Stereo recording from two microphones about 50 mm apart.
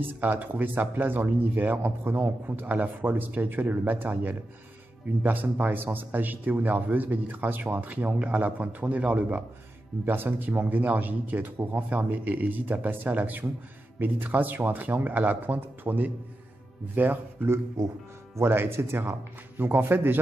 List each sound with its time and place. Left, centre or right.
0.0 s speech: right
10.0 s speech: right
18.5 s a man's voice: right